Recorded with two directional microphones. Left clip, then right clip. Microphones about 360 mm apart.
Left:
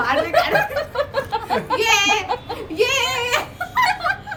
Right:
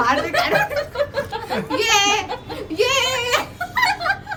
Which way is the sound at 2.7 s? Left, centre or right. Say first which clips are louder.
Right 1 dB; centre.